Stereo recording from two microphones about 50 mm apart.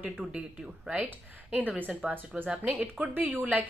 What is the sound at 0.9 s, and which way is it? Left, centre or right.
Speech, right.